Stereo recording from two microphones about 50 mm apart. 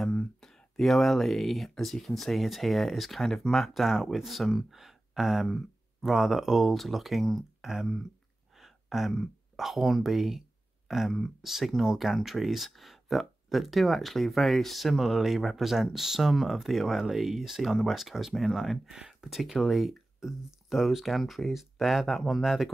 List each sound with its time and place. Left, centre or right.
0.4 s speech: centre
7.6 s speech: centre